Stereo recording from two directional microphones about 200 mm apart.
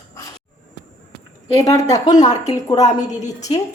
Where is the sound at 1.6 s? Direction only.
15° left (ahead or behind).